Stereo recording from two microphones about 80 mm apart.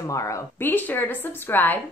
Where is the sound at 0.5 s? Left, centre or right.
Left.